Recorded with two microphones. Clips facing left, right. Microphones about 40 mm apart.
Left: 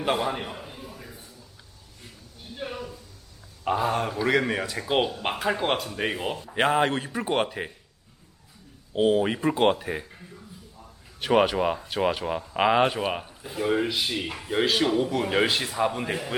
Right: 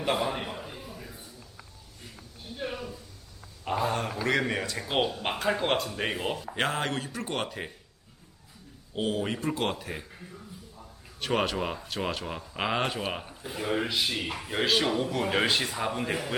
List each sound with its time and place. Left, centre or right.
0.0 s a man's voice: centre
3.6 s speech: centre
6.5 s speech: centre
9.0 s speech: centre
11.2 s speech: centre